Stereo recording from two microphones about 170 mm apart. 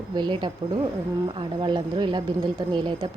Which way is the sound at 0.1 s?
25° right (ahead or behind).